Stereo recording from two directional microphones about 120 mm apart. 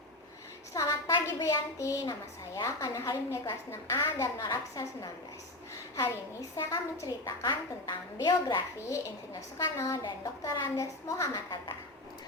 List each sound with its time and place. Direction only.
0.7 s a sound: 25° left (ahead or behind)
2.6 s a woman's voice: 25° left (ahead or behind)
6.6 s a woman's voice: 25° left (ahead or behind)